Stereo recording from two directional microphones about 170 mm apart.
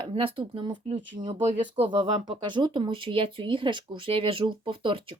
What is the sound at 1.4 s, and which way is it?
Speech, 40° right (ahead or behind).